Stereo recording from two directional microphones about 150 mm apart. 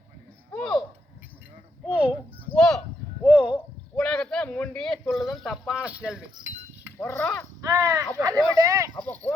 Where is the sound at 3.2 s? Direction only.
10° right (ahead or behind).